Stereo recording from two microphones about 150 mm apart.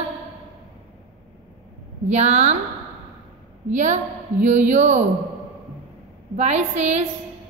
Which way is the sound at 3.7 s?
55° right (ahead or behind).